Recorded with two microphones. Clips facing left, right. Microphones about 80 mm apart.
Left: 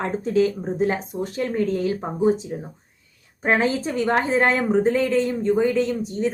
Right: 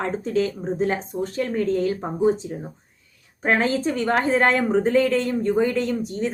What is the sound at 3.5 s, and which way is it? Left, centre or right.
Speech, centre.